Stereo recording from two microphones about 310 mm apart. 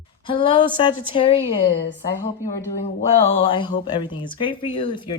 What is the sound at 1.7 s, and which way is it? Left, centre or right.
Speech, left.